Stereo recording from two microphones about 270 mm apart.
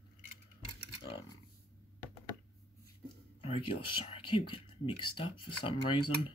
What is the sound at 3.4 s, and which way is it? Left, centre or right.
Speech, centre.